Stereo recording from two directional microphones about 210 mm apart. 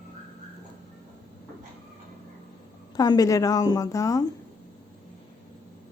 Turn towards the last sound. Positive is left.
turn(degrees=15)  # may be behind; listen again after turning